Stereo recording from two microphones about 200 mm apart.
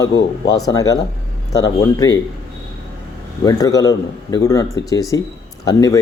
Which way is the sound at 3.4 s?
20° left (ahead or behind).